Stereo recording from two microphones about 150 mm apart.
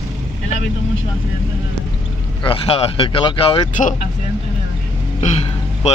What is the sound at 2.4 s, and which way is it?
Speech, 40° left (ahead or behind).